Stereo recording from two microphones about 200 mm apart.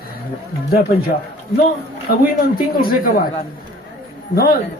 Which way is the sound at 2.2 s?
45° left (ahead or behind).